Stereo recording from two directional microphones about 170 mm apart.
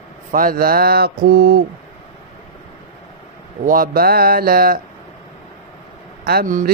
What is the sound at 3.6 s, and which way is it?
Speech, 55° right (ahead or behind).